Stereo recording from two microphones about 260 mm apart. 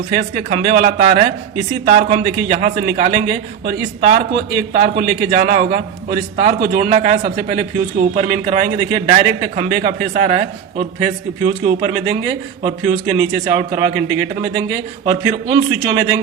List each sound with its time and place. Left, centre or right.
0.1 s a man's voice: right
15.0 s a man's voice: centre